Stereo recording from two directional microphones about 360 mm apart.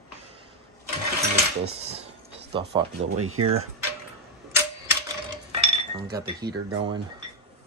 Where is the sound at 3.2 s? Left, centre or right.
Right.